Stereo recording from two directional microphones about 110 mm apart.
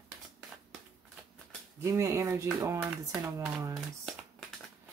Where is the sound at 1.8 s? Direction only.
25° right (ahead or behind).